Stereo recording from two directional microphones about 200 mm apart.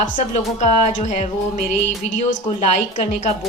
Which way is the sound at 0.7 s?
35° left (ahead or behind).